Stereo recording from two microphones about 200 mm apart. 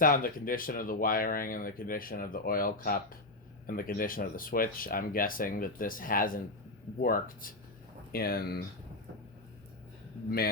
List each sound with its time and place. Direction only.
0.0 s speech: 45° left (ahead or behind)